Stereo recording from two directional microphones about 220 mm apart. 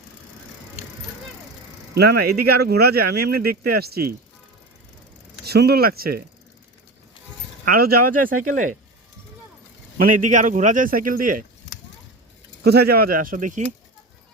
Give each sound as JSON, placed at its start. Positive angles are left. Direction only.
{"t": 2.0, "sound": "speech", "side_deg": -45}
{"t": 5.5, "sound": "speech", "side_deg": -45}
{"t": 7.6, "sound": "speech", "side_deg": -40}
{"t": 10.2, "sound": "speech", "side_deg": -35}
{"t": 12.6, "sound": "speech", "side_deg": -45}